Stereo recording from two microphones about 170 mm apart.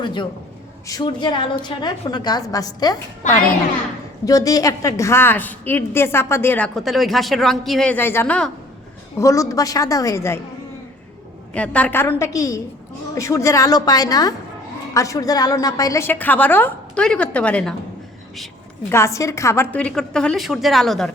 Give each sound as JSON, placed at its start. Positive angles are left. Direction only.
{"t": 0.0, "sound": "a woman's voice", "side_deg": 25}
{"t": 6.7, "sound": "a woman's voice", "side_deg": 0}
{"t": 11.5, "sound": "a woman's voice", "side_deg": 5}
{"t": 18.9, "sound": "a woman's voice", "side_deg": 15}